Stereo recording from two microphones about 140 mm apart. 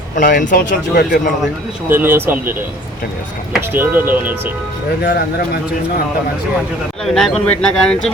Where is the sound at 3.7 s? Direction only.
15° right (ahead or behind).